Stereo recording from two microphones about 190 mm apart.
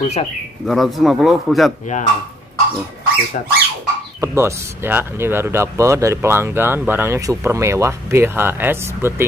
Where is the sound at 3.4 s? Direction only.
40° left (ahead or behind).